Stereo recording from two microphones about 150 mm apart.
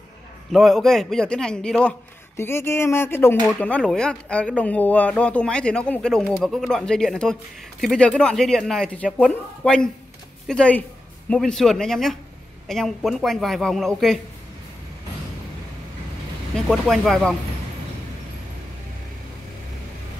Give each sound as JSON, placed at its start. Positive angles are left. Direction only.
{"t": 0.5, "sound": "speech", "side_deg": 0}
{"t": 2.3, "sound": "speech", "side_deg": 15}
{"t": 16.5, "sound": "speech", "side_deg": 5}